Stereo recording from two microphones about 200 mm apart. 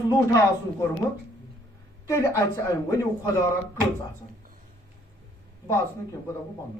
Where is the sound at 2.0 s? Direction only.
15° left (ahead or behind).